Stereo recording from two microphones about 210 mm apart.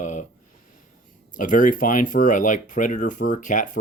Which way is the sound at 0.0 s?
35° left (ahead or behind).